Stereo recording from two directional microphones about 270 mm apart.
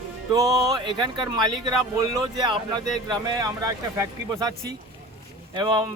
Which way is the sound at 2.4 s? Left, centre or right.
Centre.